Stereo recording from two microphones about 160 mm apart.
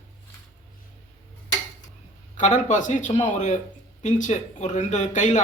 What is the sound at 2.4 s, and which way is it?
A man's voice, 50° left (ahead or behind).